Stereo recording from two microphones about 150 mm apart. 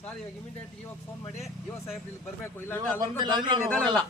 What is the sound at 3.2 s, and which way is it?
Speech, 30° right (ahead or behind).